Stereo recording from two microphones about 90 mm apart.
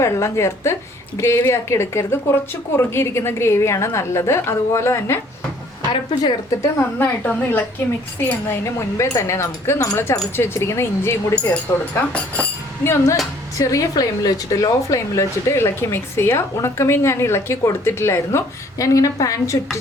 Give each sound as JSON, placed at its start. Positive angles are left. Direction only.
{"t": 0.0, "sound": "a woman's voice", "side_deg": 30}
{"t": 5.9, "sound": "a woman's voice", "side_deg": 65}
{"t": 6.5, "sound": "a woman's voice", "side_deg": 30}
{"t": 8.4, "sound": "a woman's voice", "side_deg": 30}
{"t": 11.3, "sound": "speech", "side_deg": 15}
{"t": 12.8, "sound": "a woman's voice", "side_deg": 30}
{"t": 13.6, "sound": "a woman's voice", "side_deg": 40}